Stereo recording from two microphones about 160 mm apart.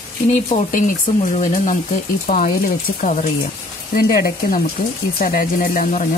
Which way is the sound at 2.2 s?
55° left (ahead or behind).